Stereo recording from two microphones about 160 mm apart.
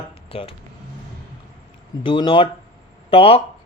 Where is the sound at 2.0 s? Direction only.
30° left (ahead or behind).